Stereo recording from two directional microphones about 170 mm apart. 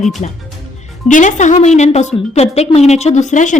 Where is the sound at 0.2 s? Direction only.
40° left (ahead or behind).